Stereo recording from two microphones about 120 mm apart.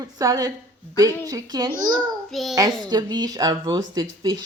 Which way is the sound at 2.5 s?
30° right (ahead or behind).